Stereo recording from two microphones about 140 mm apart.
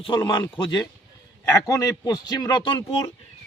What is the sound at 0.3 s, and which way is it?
A man's voice, 35° left (ahead or behind).